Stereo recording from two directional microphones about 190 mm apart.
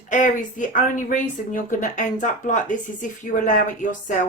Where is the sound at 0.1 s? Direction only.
40° left (ahead or behind).